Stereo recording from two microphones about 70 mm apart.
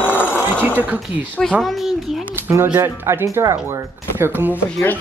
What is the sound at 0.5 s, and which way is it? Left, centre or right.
Speech, right.